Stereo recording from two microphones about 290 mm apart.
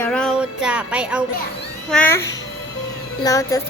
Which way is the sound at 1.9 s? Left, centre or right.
Centre.